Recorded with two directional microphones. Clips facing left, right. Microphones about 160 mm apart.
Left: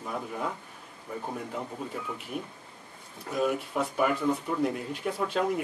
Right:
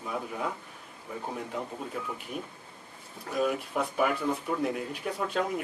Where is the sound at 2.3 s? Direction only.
5° left (ahead or behind).